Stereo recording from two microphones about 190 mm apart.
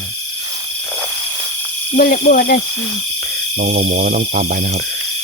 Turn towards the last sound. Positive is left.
turn(degrees=-55)  # may be behind; listen again after turning